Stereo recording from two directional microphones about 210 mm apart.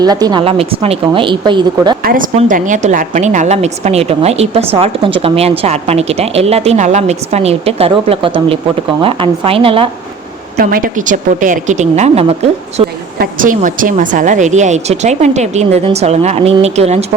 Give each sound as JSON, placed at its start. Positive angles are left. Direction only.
{"t": 0.0, "sound": "a woman's voice", "side_deg": -20}
{"t": 2.0, "sound": "a woman's voice", "side_deg": -40}
{"t": 10.6, "sound": "a woman's voice", "side_deg": -45}